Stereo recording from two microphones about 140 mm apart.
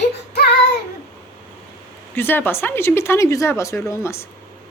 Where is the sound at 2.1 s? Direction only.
15° left (ahead or behind).